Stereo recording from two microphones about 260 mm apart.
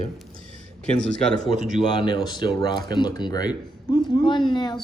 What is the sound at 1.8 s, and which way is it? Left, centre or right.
Speech, centre.